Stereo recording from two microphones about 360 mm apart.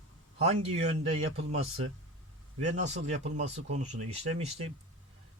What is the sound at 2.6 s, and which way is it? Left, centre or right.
Speech, centre.